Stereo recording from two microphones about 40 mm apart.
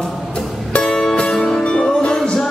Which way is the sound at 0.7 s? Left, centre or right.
Left.